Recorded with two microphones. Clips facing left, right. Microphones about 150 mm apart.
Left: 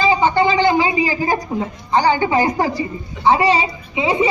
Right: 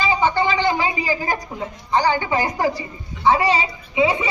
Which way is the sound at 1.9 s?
25° left (ahead or behind).